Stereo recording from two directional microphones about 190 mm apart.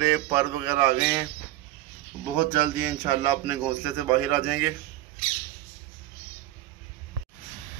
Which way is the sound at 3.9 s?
15° right (ahead or behind).